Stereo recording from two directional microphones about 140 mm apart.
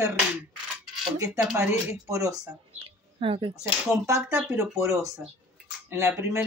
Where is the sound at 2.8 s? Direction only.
40° right (ahead or behind).